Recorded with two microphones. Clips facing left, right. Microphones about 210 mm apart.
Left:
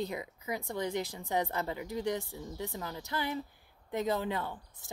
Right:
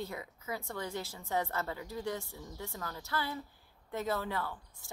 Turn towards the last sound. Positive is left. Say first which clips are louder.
# left 1 dB
turn(degrees=20)  # may be behind; listen again after turning